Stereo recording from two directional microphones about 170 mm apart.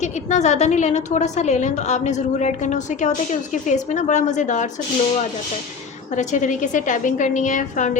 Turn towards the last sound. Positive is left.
turn(degrees=50)  # may be behind; listen again after turning